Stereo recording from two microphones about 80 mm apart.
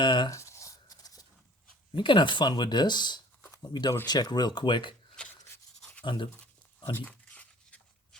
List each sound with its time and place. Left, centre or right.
0.0 s writing: left
0.3 s writing: left
1.9 s speech: left
5.2 s rub: centre
5.8 s a sound: centre